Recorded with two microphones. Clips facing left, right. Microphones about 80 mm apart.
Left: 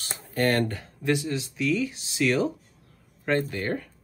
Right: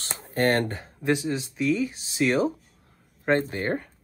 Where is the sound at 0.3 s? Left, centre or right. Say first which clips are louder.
Right 1 dB; right.